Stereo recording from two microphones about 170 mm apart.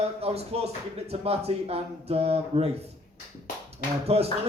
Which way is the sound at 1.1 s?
35° right (ahead or behind).